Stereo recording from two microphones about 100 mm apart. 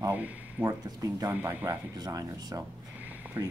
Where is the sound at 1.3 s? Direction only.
20° right (ahead or behind).